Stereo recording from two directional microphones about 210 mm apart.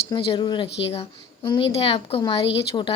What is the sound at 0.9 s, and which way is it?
A woman's voice, 25° left (ahead or behind).